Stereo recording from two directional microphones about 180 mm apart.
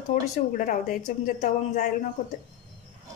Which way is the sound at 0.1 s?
50° left (ahead or behind).